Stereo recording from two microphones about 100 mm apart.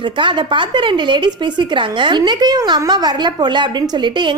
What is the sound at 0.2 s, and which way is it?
A woman's voice, 55° right (ahead or behind).